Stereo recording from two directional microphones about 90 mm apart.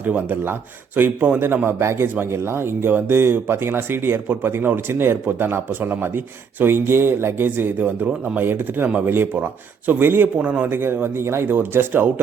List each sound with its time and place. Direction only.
0.0 s speech: 20° right (ahead or behind)